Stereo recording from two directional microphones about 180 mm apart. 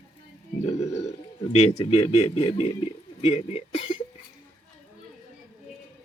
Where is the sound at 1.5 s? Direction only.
35° left (ahead or behind).